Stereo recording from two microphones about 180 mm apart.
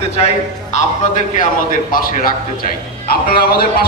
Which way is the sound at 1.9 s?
50° left (ahead or behind).